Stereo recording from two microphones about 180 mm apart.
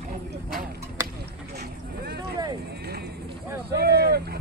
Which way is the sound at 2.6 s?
65° right (ahead or behind).